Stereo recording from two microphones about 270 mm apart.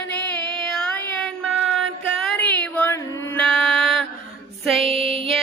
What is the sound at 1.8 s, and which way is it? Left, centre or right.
Music, centre.